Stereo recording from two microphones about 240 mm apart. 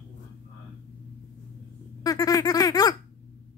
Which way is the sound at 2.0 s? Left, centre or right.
Centre.